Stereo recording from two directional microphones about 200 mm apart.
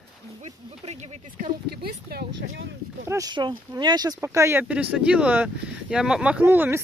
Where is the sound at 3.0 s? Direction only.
15° right (ahead or behind).